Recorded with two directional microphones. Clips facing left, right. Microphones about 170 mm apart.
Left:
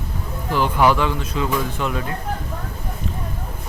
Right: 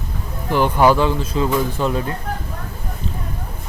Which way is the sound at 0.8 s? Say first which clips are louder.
Right 3 dB; 35° right (ahead or behind).